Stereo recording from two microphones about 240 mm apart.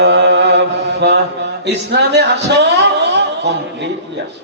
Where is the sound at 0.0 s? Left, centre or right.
Right.